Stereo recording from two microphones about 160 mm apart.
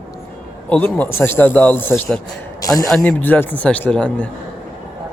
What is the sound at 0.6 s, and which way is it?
Speech, 10° left (ahead or behind).